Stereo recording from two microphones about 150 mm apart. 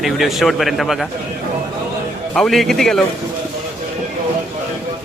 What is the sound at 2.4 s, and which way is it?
Speech, centre (ahead or behind).